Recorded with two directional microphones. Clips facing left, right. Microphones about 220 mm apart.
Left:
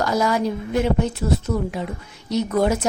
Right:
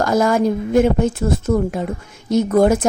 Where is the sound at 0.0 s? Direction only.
50° right (ahead or behind).